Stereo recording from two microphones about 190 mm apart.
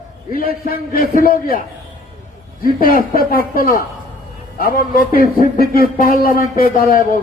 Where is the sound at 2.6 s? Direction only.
50° left (ahead or behind).